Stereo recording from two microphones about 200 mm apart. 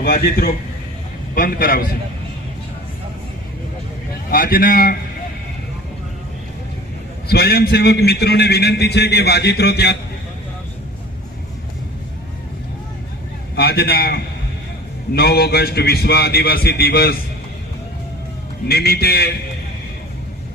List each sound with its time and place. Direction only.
0.0 s a man's voice: 50° left (ahead or behind)
4.3 s a man's voice: 45° left (ahead or behind)
7.3 s a man's voice: 50° left (ahead or behind)
13.6 s a man's voice: 50° left (ahead or behind)
18.7 s a man's voice: 55° left (ahead or behind)